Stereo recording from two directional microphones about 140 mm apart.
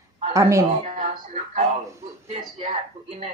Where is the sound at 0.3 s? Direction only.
20° right (ahead or behind).